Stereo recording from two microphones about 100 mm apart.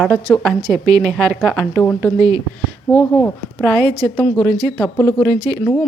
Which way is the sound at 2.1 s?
40° right (ahead or behind).